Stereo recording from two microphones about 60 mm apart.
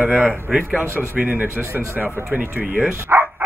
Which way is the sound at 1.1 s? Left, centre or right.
Right.